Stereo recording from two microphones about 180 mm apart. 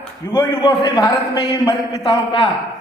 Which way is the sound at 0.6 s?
25° left (ahead or behind).